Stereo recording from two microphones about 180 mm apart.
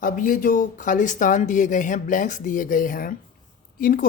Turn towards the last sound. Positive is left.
turn(degrees=50)  # may be behind; listen again after turning